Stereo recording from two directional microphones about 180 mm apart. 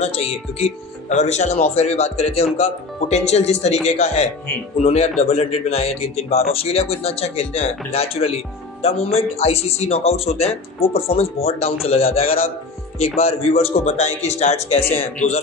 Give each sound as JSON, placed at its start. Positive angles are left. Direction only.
{"t": 0.0, "sound": "speech", "side_deg": 35}